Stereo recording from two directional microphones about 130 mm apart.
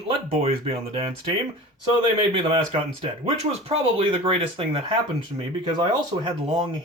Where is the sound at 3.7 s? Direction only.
45° right (ahead or behind).